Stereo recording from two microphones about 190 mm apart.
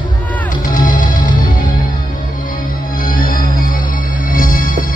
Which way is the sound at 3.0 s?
50° left (ahead or behind).